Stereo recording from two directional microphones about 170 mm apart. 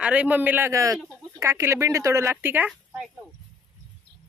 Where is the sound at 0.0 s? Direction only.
10° right (ahead or behind).